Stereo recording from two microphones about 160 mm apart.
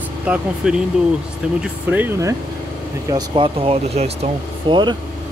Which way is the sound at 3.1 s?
30° right (ahead or behind).